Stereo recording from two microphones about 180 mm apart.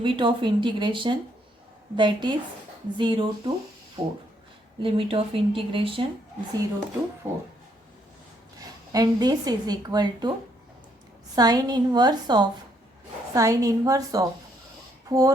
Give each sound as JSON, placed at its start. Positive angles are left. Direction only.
{"t": 0.0, "sound": "a woman's voice", "side_deg": -30}
{"t": 7.2, "sound": "speech", "side_deg": -10}
{"t": 8.9, "sound": "a woman's voice", "side_deg": -20}
{"t": 11.3, "sound": "a woman's voice", "side_deg": -20}